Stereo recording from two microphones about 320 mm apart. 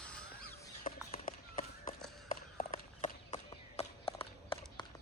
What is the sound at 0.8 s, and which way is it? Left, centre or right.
Run, centre.